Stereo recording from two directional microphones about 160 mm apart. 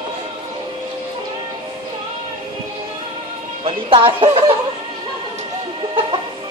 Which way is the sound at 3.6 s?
35° right (ahead or behind).